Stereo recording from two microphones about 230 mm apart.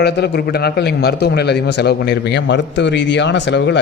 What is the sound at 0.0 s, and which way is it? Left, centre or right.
A man's voice, left.